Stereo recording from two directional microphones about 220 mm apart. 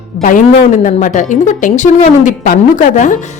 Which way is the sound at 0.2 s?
35° left (ahead or behind).